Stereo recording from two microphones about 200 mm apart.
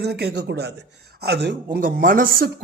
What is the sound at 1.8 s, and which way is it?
Speech, 45° right (ahead or behind).